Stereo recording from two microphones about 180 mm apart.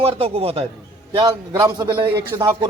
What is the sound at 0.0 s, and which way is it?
Speech, 35° right (ahead or behind).